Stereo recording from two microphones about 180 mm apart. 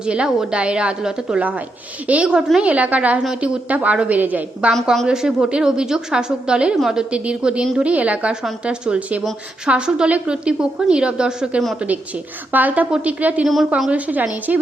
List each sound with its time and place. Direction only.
0.0 s a woman's voice: 5° right (ahead or behind)